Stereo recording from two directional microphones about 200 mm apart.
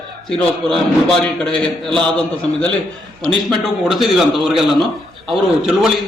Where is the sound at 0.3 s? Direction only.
Centre (ahead or behind).